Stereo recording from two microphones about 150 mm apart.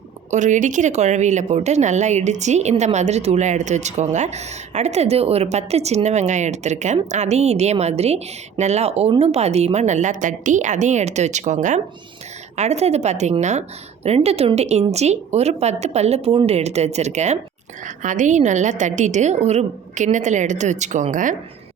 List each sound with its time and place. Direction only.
0.3 s speech: 55° right (ahead or behind)